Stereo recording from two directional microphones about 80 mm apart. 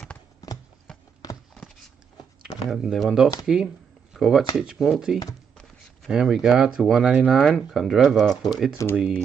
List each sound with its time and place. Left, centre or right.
2.6 s speech: centre
8.8 s speech: left